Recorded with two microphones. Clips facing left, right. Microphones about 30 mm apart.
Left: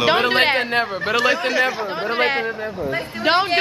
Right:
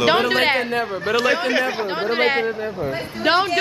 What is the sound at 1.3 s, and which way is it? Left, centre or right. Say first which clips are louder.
Speech: right 1 dB; right.